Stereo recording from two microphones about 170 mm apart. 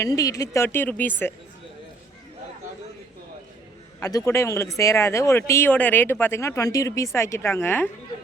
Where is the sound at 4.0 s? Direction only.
20° left (ahead or behind).